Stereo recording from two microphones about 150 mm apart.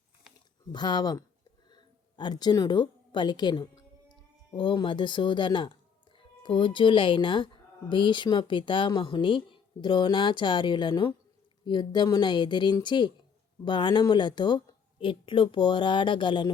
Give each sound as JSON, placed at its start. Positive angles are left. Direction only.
{"t": 0.7, "sound": "a woman's voice", "side_deg": 30}